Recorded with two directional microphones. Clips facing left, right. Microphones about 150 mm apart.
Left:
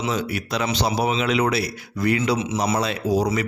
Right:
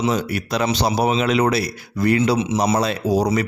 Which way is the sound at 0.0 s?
40° right (ahead or behind).